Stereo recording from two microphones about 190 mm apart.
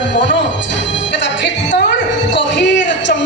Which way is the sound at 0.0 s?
70° left (ahead or behind).